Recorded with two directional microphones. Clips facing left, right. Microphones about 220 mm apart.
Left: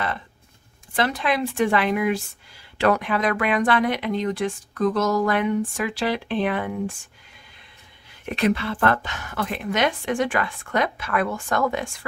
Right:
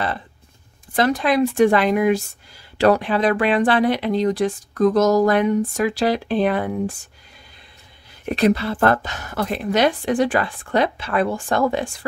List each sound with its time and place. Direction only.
0.9 s speech: 40° right (ahead or behind)
8.3 s speech: 40° right (ahead or behind)